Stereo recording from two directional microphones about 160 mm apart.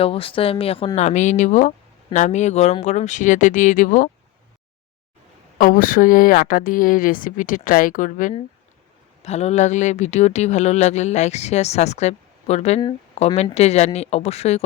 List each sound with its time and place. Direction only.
0.0 s speech: 35° left (ahead or behind); by 4.1 s 55° left (ahead or behind)
5.5 s a woman's voice: 60° left (ahead or behind)
9.2 s speech: 45° left (ahead or behind)